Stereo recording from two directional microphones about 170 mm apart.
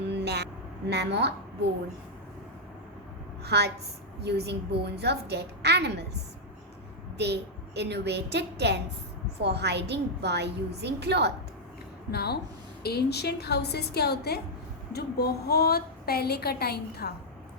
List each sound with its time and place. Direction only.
0.1 s vehicle: 80° right
0.9 s a woman's voice: 80° right
3.4 s a woman's voice: 75° right (ahead or behind)
7.2 s a woman's voice: 80° right
12.1 s a woman's voice: 70° left (ahead or behind)